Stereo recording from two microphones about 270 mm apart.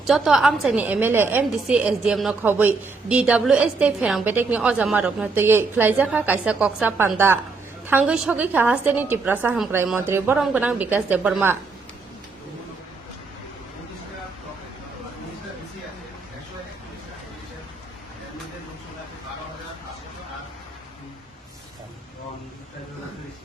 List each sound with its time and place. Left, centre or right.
0.0 s a woman's voice: centre